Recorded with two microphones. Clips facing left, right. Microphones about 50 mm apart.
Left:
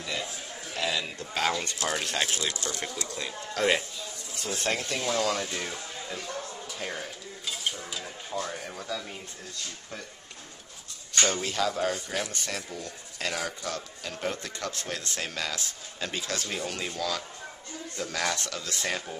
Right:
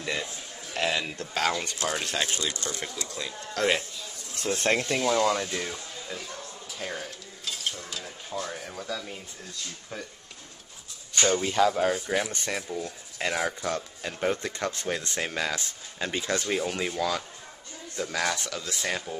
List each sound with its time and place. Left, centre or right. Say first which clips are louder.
0.0 s a sound: right 2 dB; right
0.7 s speech: right 3 dB; right
1.9 s speech: even; centre
2.4 s speech: even; centre
2.8 s speech: even; centre
4.4 s speech: right 5 dB; right
4.9 s speech: right 3 dB; centre
5.4 s speech: right 1 dB; centre
6.8 s dishes: right 2 dB; centre
11.1 s speech: right 4 dB; centre; by 16.5 s right
16.5 s speech: right 5 dB; centre